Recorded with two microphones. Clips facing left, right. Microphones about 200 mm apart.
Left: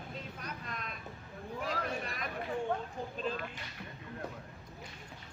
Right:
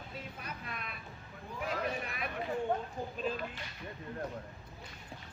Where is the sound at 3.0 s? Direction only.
10° right (ahead or behind).